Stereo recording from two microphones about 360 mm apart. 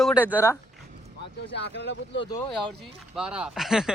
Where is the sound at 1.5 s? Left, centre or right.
Left.